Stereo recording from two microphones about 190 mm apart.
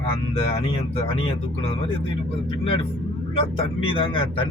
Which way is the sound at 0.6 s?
30° left (ahead or behind).